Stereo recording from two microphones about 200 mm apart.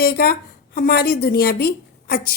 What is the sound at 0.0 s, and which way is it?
A woman's voice, 50° left (ahead or behind).